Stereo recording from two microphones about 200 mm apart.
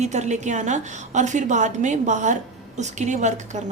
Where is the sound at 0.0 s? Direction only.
35° right (ahead or behind).